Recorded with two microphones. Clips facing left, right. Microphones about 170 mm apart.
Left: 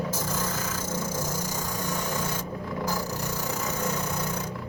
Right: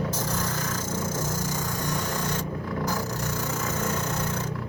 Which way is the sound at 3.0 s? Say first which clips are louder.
Right 1 dB; 10° left (ahead or behind).